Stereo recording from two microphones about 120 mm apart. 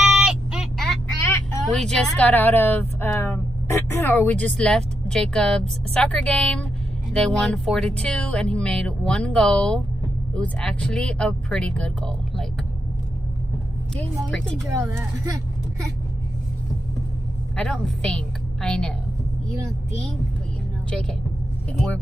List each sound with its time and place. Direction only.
0.2 s a sound: 5° right (ahead or behind)
1.7 s a woman's voice: 5° left (ahead or behind)
14.7 s speech: 25° right (ahead or behind)
17.6 s a woman's voice: 10° left (ahead or behind)